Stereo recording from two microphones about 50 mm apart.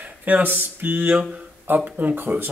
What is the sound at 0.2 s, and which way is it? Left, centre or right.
Speech, right.